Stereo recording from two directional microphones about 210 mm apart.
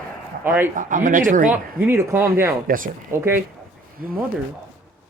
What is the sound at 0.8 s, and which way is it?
Speech, 40° right (ahead or behind).